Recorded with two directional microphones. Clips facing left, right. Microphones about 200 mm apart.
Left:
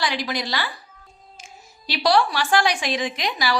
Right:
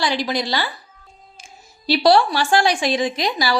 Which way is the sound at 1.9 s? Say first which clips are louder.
Right 5 dB; 30° right (ahead or behind).